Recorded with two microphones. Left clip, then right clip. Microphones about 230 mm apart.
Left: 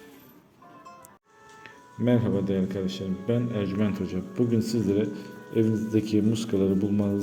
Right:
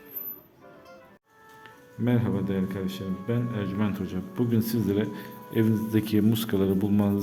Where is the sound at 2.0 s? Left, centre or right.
Centre.